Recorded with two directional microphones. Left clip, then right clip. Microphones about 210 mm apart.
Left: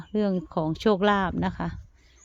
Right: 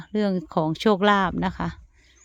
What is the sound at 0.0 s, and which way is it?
Speech, 10° right (ahead or behind).